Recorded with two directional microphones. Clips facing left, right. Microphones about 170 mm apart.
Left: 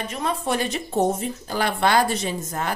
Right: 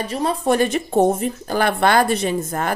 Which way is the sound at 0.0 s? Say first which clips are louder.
Right 5 dB; 35° right (ahead or behind).